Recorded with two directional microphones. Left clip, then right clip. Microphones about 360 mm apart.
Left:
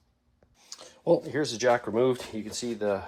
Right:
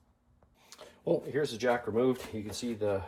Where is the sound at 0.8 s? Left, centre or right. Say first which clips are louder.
Left 6 dB; centre.